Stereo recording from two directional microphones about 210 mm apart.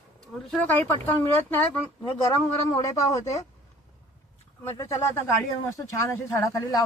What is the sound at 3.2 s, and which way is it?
Speech, 30° left (ahead or behind).